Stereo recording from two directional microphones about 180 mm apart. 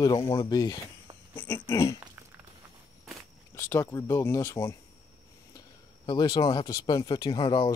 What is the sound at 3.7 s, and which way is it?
Speech, 15° left (ahead or behind).